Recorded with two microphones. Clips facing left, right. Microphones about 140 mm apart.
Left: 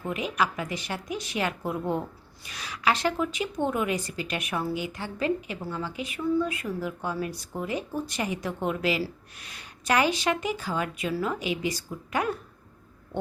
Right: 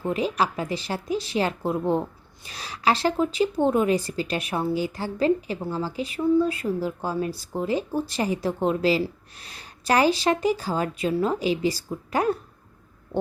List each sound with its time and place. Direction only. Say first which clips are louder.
0.0 s a woman's voice: right 4 dB; 30° right (ahead or behind)